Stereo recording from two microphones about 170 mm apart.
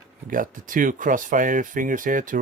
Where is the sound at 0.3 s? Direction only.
50° right (ahead or behind).